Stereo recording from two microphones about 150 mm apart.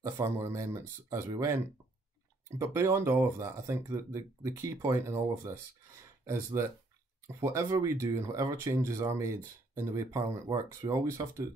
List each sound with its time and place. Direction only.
0.0 s speech: 20° right (ahead or behind)
2.6 s speech: 20° right (ahead or behind)
7.3 s speech: 20° right (ahead or behind)